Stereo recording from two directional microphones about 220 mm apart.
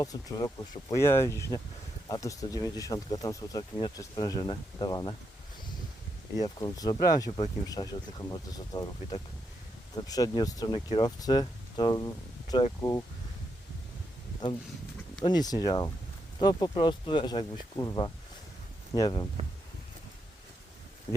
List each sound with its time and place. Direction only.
0.0 s speech: 15° left (ahead or behind)
6.3 s speech: 15° left (ahead or behind)
7.3 s speech: 30° left (ahead or behind)
15.2 s speech: 20° left (ahead or behind)